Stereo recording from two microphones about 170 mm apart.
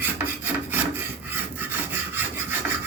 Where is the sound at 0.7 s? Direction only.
10° right (ahead or behind).